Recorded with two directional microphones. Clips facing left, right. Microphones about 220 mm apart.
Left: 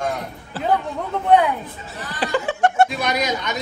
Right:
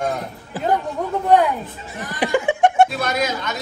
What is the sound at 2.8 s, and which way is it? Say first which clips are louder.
Speech: right 1 dB; centre (ahead or behind).